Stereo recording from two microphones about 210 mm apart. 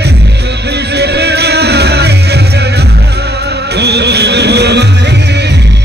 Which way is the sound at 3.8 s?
55° right (ahead or behind).